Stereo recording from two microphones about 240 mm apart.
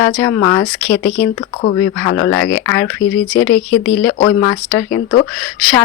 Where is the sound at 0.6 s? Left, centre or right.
Left.